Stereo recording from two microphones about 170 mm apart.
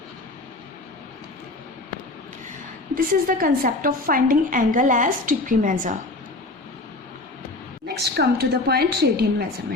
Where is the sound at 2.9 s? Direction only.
55° right (ahead or behind).